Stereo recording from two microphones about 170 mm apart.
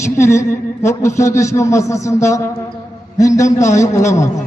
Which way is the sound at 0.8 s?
15° left (ahead or behind).